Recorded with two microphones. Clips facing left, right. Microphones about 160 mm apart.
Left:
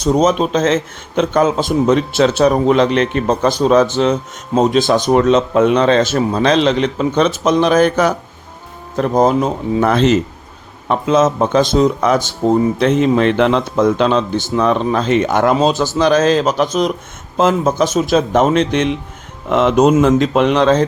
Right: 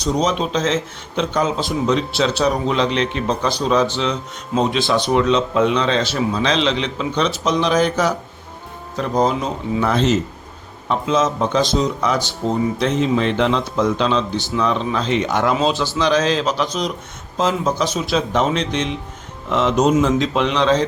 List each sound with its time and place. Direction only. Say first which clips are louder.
0.0 s a man's voice: left 6 dB; 50° left (ahead or behind)